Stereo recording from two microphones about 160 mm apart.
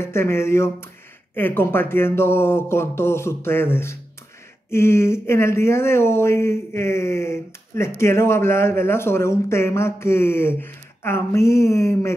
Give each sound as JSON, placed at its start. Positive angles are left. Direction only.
{"t": 0.0, "sound": "speech", "side_deg": 15}